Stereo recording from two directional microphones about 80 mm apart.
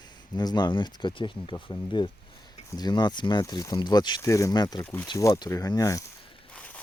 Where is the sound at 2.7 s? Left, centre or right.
Left.